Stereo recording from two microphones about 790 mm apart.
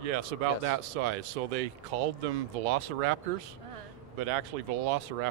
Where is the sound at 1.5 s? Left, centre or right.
Right.